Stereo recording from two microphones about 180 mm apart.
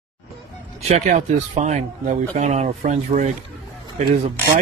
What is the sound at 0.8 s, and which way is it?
Speech, 40° right (ahead or behind).